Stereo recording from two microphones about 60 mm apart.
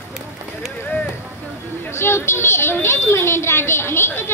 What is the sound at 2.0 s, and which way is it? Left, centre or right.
A woman's voice, left.